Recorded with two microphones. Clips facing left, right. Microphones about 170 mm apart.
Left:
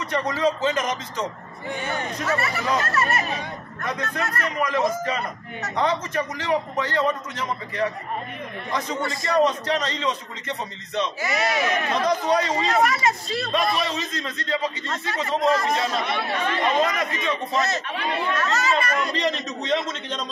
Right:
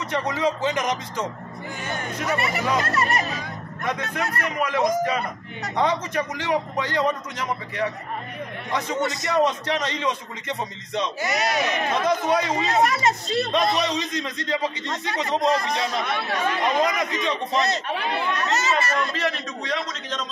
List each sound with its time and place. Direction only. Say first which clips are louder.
0.1 s a man's voice: left 1 dB; 15° right (ahead or behind)
1.7 s speech: left 4 dB; 30° left (ahead or behind)
2.2 s a man's voice: right 1 dB; 20° right (ahead or behind)
12.8 s a man's voice: right 1 dB; 20° right (ahead or behind)
19.0 s a man's voice: left 2 dB; 15° left (ahead or behind)